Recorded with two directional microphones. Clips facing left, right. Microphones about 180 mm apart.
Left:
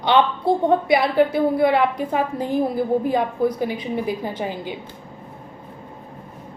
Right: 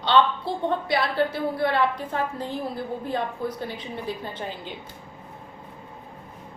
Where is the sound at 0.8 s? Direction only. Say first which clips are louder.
Left 7 dB; 20° left (ahead or behind).